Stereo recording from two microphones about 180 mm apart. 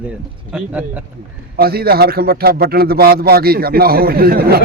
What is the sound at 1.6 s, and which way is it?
A man's voice, 55° right (ahead or behind).